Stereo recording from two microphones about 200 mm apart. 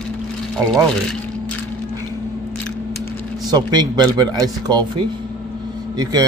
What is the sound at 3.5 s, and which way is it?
Speech, 20° right (ahead or behind).